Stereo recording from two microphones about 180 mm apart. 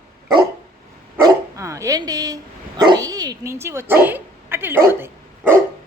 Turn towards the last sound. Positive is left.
turn(degrees=-15)  # may be behind; listen again after turning